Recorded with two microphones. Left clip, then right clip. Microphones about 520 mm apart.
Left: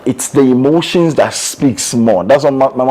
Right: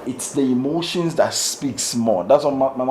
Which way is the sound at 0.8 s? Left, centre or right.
Left.